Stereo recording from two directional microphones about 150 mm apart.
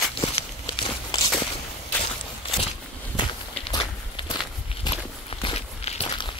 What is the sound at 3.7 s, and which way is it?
Walk, 30° left (ahead or behind).